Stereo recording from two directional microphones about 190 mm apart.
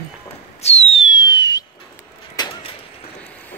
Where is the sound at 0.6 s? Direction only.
35° left (ahead or behind).